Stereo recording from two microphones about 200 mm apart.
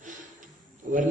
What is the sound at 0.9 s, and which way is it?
Speech, 35° right (ahead or behind).